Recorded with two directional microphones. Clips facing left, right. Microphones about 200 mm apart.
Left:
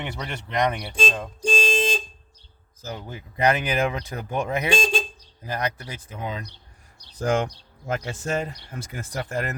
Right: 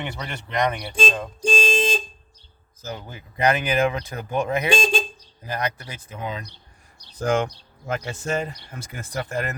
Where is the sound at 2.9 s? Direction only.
30° left (ahead or behind).